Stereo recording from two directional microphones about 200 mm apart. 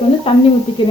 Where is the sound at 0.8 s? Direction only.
25° left (ahead or behind).